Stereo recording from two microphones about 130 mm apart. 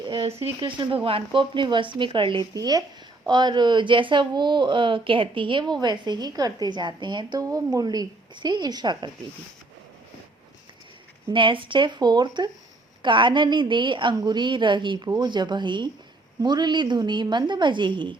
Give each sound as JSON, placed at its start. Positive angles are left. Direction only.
{"t": 0.0, "sound": "a sound", "side_deg": -35}
{"t": 0.3, "sound": "a woman's voice", "side_deg": -50}
{"t": 2.5, "sound": "a woman's voice", "side_deg": -30}
{"t": 11.3, "sound": "a woman's voice", "side_deg": -40}